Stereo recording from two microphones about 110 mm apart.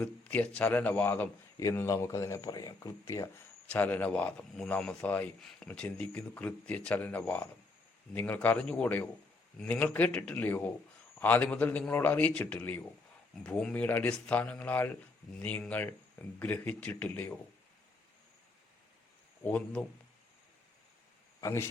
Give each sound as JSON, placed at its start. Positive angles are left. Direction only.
{"t": 0.0, "sound": "a man's voice", "side_deg": 10}
{"t": 1.5, "sound": "speech", "side_deg": 25}
{"t": 3.7, "sound": "a man's voice", "side_deg": 15}
{"t": 19.5, "sound": "a man's voice", "side_deg": 10}
{"t": 21.4, "sound": "speech", "side_deg": 25}